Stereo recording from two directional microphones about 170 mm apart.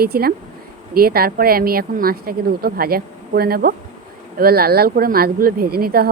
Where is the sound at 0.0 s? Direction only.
65° right (ahead or behind).